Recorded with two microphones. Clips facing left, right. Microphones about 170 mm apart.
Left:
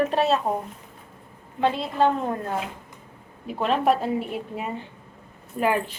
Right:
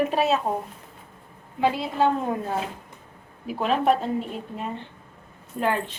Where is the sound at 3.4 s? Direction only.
Centre (ahead or behind).